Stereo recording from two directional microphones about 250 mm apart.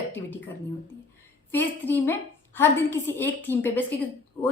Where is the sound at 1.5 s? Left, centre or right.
Centre.